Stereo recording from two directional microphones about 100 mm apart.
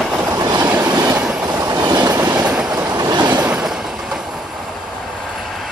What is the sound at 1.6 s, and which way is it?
Train, 35° right (ahead or behind).